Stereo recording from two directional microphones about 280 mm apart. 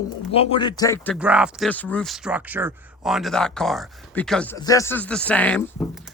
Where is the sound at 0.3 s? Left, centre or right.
Centre.